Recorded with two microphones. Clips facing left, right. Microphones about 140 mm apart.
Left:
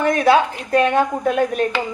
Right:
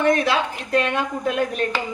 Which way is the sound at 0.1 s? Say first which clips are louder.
Left 5 dB; 45° left (ahead or behind).